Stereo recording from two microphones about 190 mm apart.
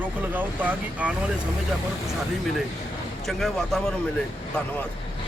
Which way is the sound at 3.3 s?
Centre (ahead or behind).